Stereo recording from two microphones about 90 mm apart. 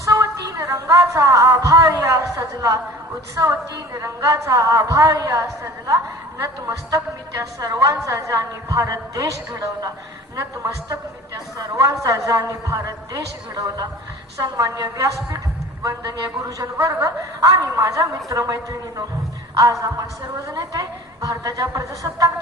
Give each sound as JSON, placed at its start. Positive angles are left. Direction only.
{"t": 0.0, "sound": "a woman's voice", "side_deg": -35}
{"t": 10.3, "sound": "a woman's voice", "side_deg": -40}
{"t": 16.4, "sound": "a woman's voice", "side_deg": -35}
{"t": 20.5, "sound": "a woman's voice", "side_deg": -40}